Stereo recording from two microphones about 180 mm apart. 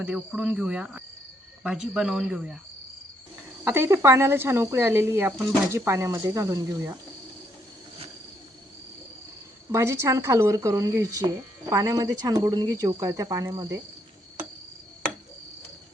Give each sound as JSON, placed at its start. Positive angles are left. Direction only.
{"t": 0.0, "sound": "speech", "side_deg": -5}
{"t": 3.6, "sound": "speech", "side_deg": -15}
{"t": 9.7, "sound": "speech", "side_deg": -15}